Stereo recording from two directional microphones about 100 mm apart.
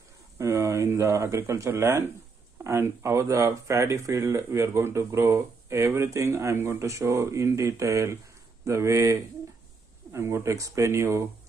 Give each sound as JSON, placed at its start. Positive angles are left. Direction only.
{"t": 0.4, "sound": "speech", "side_deg": -30}